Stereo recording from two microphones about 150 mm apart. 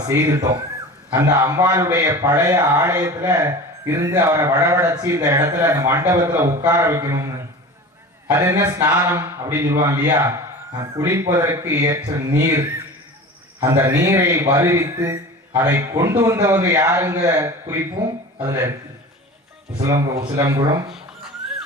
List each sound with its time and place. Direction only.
0.1 s a man's voice: 20° right (ahead or behind)
20.1 s a man's voice: 20° right (ahead or behind)
20.9 s a sound: 5° right (ahead or behind)